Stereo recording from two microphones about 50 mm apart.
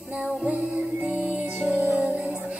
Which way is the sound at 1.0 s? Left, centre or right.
Right.